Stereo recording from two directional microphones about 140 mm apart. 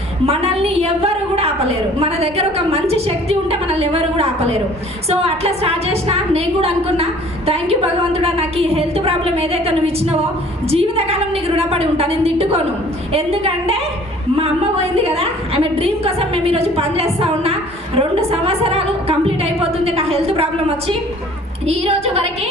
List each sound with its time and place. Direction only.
0.3 s a woman's voice: 45° right (ahead or behind)